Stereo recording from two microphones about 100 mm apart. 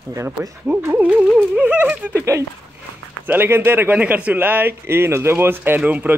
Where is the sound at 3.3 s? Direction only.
20° right (ahead or behind).